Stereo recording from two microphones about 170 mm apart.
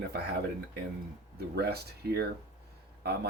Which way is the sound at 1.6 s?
70° right (ahead or behind).